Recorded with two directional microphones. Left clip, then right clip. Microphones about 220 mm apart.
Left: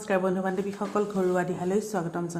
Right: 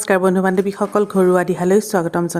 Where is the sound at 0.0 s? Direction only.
50° right (ahead or behind).